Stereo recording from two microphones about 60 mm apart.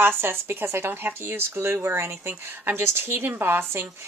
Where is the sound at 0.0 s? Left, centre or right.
Right.